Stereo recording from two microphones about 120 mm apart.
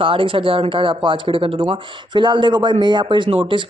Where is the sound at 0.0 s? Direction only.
45° right (ahead or behind).